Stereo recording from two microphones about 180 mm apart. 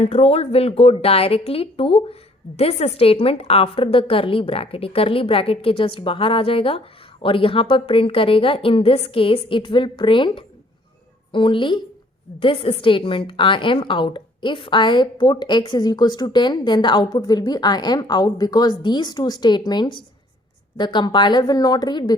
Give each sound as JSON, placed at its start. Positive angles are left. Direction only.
{"t": 0.0, "sound": "a woman's voice", "side_deg": 35}